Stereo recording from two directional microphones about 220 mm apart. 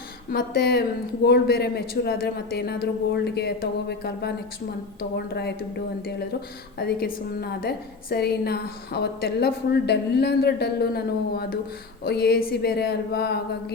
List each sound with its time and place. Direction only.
0.3 s a woman's voice: 45° left (ahead or behind)